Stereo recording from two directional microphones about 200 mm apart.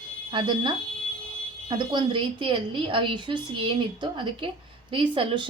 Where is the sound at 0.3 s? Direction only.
25° right (ahead or behind).